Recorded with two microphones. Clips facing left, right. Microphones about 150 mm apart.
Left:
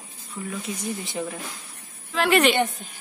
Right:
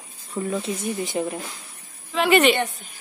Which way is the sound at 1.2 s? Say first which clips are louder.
Right 5 dB; 25° right (ahead or behind).